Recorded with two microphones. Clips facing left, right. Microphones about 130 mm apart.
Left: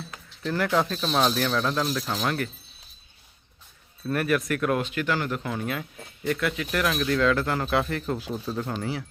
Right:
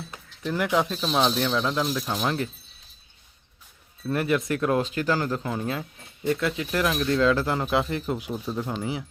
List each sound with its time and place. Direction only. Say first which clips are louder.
0.1 s speech: even; 15° right (ahead or behind)
4.1 s speech: even; 20° right (ahead or behind)